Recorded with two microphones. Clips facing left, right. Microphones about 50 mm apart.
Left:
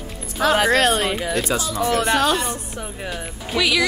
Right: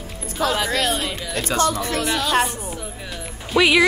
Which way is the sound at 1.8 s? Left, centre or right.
Left.